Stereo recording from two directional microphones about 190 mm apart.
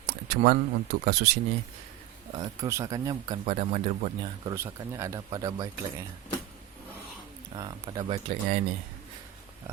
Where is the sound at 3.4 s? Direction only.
35° right (ahead or behind).